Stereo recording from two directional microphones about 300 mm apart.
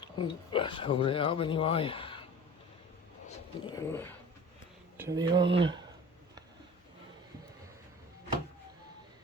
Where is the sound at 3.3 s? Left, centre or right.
Centre.